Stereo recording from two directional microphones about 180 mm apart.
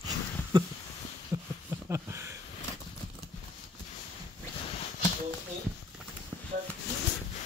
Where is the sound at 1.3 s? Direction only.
15° right (ahead or behind).